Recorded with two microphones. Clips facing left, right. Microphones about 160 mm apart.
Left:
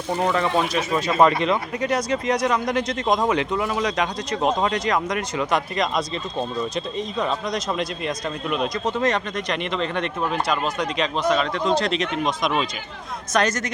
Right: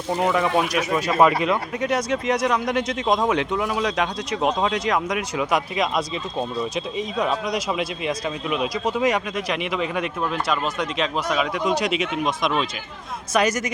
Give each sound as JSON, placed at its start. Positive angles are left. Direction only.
{"t": 0.2, "sound": "speech", "side_deg": -10}